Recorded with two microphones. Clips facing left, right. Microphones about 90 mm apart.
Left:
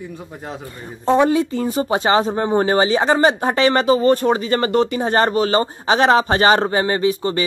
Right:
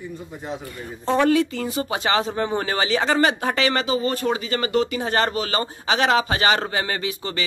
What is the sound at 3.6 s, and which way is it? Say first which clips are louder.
Speech: left 7 dB; 40° left (ahead or behind).